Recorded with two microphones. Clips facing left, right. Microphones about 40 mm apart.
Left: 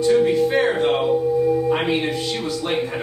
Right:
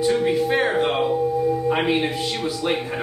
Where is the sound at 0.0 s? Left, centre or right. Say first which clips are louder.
Left 3 dB; centre.